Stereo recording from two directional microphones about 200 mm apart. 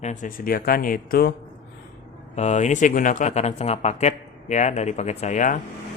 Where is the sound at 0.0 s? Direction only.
40° left (ahead or behind).